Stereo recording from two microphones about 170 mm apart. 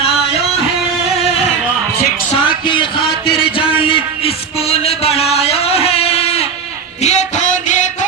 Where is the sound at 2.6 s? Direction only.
30° left (ahead or behind).